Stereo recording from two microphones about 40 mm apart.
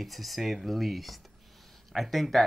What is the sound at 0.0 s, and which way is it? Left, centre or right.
Speech, centre.